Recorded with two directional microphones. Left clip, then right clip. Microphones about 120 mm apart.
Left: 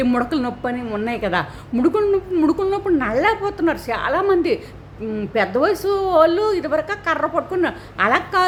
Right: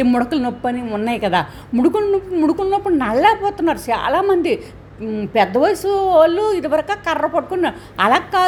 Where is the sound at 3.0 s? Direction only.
20° right (ahead or behind); by 5.3 s 5° right (ahead or behind).